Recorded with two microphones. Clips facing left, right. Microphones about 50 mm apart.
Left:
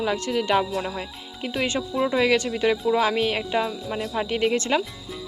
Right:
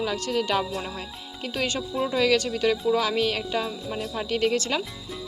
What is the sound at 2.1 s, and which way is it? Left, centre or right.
Speech, left.